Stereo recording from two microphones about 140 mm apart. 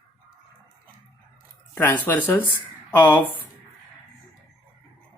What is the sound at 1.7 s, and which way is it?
Speech, 15° left (ahead or behind).